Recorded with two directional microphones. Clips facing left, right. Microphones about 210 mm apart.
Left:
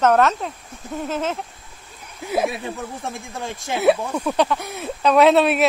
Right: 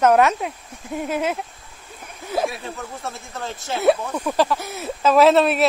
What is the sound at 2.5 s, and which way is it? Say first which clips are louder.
Speech: left 3 dB; 15° left (ahead or behind).